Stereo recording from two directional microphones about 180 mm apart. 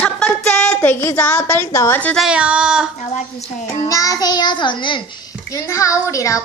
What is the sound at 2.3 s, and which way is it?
Speech, 5° right (ahead or behind).